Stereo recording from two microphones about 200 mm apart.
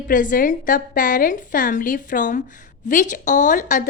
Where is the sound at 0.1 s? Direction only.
40° left (ahead or behind).